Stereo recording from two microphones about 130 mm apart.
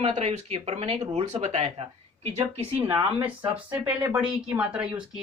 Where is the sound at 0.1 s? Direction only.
55° right (ahead or behind).